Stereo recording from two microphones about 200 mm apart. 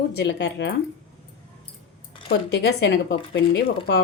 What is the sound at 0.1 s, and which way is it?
Speech, 55° left (ahead or behind).